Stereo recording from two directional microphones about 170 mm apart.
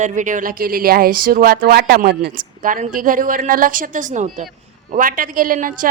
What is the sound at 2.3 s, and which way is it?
A woman's voice, 50° right (ahead or behind).